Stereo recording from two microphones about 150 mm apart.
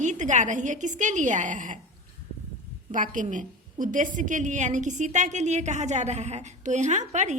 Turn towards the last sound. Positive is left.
turn(degrees=-55)  # may be behind; listen again after turning